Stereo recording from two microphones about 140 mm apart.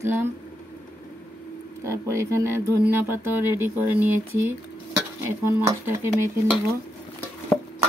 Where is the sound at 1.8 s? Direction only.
20° right (ahead or behind).